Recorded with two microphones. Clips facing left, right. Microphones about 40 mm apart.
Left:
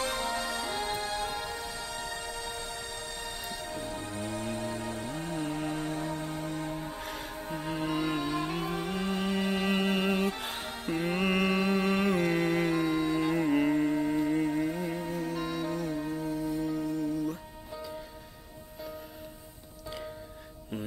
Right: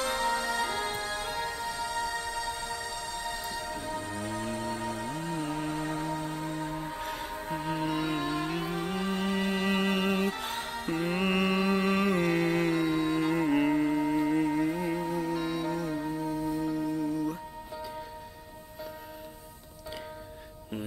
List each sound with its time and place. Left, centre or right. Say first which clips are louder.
0.1 s music: right 3 dB; right
7.0 s music: right 3 dB; centre
7.3 s music: right 2 dB; right
7.9 s music: even; centre
9.2 s music: even; centre
9.5 s music: even; centre
11.0 s mantra: even; centre
13.2 s music: even; centre